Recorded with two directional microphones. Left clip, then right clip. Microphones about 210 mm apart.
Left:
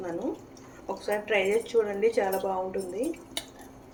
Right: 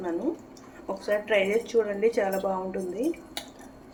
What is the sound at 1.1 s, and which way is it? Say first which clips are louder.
Speech: right 2 dB; 10° right (ahead or behind).